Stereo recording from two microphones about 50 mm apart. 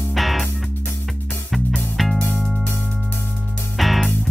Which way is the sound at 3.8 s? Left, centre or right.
Centre.